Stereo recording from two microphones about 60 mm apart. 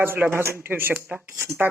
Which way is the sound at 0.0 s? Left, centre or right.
Right.